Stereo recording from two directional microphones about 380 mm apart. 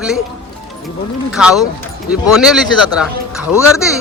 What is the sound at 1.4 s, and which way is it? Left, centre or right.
A man's voice, centre.